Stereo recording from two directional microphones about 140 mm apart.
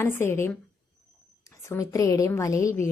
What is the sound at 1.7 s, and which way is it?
A woman's voice, 20° left (ahead or behind).